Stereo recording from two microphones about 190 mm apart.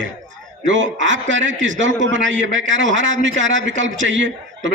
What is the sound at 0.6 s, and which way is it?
A man's voice, 80° right.